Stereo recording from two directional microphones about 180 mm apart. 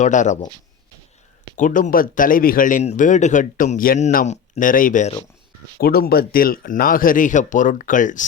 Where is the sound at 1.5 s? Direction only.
45° left (ahead or behind).